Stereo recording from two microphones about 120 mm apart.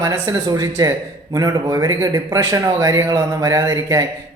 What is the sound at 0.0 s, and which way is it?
Speech, 30° right (ahead or behind).